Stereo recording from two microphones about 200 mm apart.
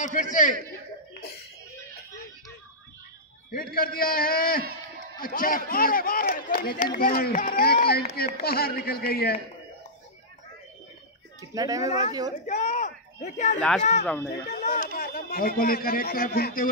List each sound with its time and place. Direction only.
0.0 s a man's voice: 40° left (ahead or behind)
3.5 s speech: 45° left (ahead or behind)
11.5 s speech: 15° right (ahead or behind)
12.4 s speech: 40° left (ahead or behind)
14.0 s speech: 10° left (ahead or behind)
14.5 s speech: 35° left (ahead or behind)